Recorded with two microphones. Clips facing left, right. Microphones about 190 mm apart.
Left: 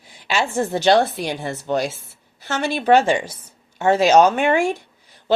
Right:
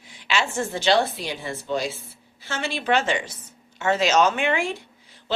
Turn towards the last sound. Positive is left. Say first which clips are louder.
# left 5 dB
turn(degrees=40)  # may be behind; listen again after turning